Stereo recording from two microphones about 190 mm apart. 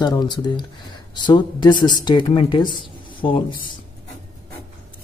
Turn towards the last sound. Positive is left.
turn(degrees=25)  # may be behind; listen again after turning